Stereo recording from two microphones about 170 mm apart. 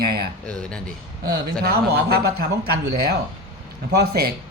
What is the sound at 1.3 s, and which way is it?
A man's voice, 70° right (ahead or behind).